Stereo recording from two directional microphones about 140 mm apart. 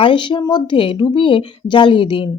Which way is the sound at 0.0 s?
35° left (ahead or behind).